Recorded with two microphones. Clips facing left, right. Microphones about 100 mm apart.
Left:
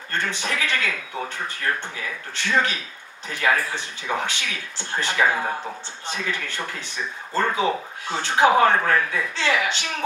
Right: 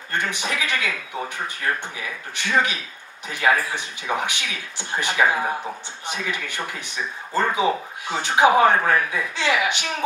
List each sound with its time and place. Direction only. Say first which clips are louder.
0.1 s speech: right 1 dB; 15° right (ahead or behind)